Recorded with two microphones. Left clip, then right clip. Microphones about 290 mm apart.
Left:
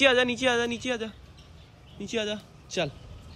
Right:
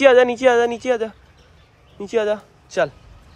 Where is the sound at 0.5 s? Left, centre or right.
Centre.